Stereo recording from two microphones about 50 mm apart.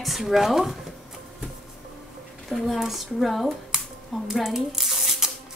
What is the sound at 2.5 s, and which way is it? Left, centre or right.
Speech, centre.